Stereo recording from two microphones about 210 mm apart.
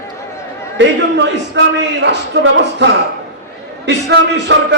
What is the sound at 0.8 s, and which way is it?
A man's voice, 55° right (ahead or behind).